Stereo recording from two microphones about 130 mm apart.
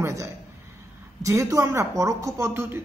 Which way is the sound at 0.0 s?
25° right (ahead or behind).